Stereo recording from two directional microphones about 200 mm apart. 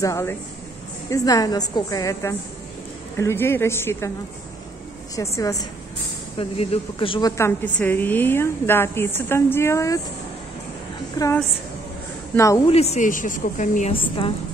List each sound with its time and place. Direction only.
0.0 s a woman's voice: 15° left (ahead or behind)
5.1 s a woman's voice: 15° left (ahead or behind)
6.3 s a woman's voice: 30° left (ahead or behind); by 9.9 s 15° left (ahead or behind)
11.2 s a woman's voice: 20° left (ahead or behind)
12.4 s a woman's voice: 15° left (ahead or behind)
12.6 s speech: 30° left (ahead or behind)
13.9 s a woman's voice: 25° left (ahead or behind)